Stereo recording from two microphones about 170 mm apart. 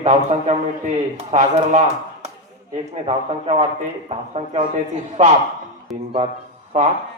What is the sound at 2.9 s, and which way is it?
A man's voice, 40° right (ahead or behind).